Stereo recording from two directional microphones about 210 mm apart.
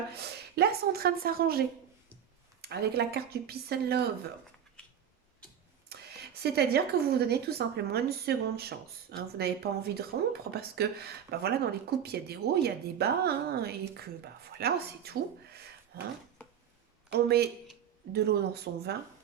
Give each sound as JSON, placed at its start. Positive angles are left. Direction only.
{"t": 0.1, "sound": "a woman's voice", "side_deg": -50}
{"t": 6.4, "sound": "a woman's voice", "side_deg": -50}
{"t": 17.1, "sound": "a woman's voice", "side_deg": -50}